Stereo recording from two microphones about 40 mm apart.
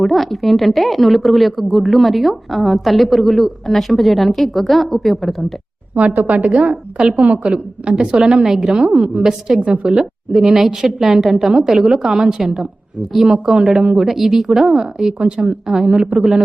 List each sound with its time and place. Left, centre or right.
0.0 s a woman's voice: centre
5.9 s a woman's voice: right; by 9.6 s centre
9.6 s a woman's voice: right
10.0 s a woman's voice: centre
14.1 s a woman's voice: centre